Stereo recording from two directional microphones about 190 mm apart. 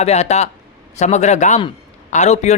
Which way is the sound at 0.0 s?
35° left (ahead or behind).